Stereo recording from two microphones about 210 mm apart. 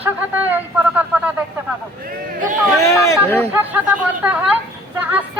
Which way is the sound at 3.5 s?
5° right (ahead or behind).